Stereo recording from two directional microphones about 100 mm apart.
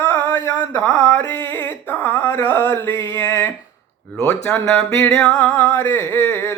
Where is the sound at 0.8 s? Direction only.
25° left (ahead or behind).